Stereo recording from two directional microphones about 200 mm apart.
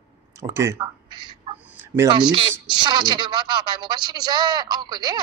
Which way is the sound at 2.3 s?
20° right (ahead or behind).